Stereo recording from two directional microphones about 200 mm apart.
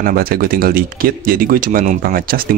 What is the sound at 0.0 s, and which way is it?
Speech, 45° right (ahead or behind).